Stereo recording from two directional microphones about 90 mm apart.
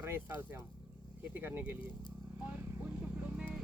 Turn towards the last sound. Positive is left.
turn(degrees=-15)  # may be behind; listen again after turning